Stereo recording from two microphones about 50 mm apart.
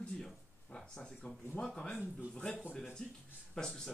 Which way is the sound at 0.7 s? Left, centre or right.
Centre.